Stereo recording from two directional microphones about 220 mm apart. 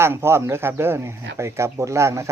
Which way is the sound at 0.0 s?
10° right (ahead or behind).